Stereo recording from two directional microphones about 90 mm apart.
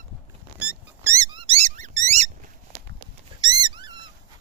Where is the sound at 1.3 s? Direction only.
90° right.